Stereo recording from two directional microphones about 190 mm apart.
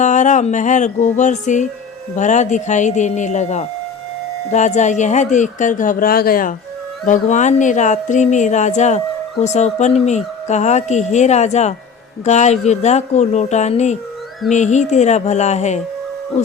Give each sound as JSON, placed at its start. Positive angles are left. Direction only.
{"t": 0.0, "sound": "speech", "side_deg": 40}
{"t": 7.1, "sound": "speech", "side_deg": 40}